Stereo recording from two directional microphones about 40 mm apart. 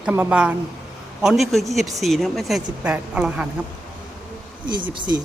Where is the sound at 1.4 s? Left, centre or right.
Centre.